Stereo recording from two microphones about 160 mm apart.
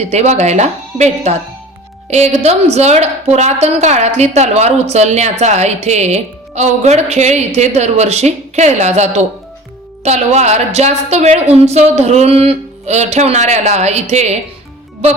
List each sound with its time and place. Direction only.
0.1 s a woman's voice: 45° right (ahead or behind)